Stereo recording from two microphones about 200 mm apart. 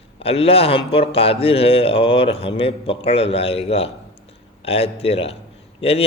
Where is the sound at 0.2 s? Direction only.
30° left (ahead or behind).